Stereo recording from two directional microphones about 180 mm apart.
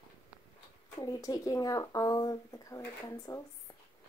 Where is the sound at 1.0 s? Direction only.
20° left (ahead or behind).